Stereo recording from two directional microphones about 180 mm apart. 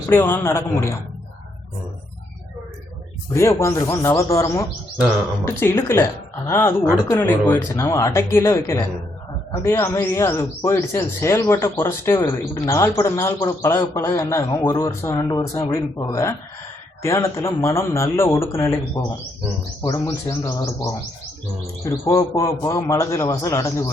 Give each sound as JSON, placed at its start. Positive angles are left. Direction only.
{"t": 0.1, "sound": "speech", "side_deg": 15}
{"t": 3.3, "sound": "speech", "side_deg": 15}